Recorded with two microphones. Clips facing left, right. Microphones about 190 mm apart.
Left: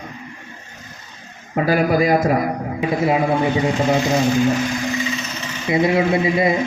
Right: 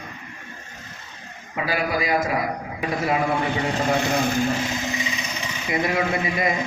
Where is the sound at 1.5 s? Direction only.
45° left (ahead or behind).